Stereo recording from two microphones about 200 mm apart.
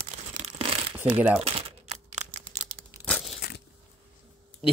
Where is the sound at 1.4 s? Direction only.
30° right (ahead or behind).